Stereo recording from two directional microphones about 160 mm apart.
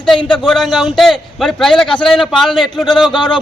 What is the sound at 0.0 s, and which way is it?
A man's voice, 5° left (ahead or behind).